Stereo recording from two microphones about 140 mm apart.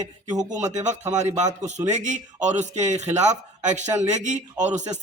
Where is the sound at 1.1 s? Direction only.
60° right (ahead or behind).